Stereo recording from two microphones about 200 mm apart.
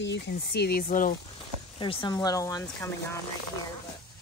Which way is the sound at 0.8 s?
40° left (ahead or behind).